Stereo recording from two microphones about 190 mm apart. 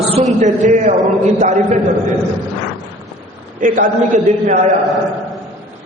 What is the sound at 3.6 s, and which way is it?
A man's voice, 45° right (ahead or behind).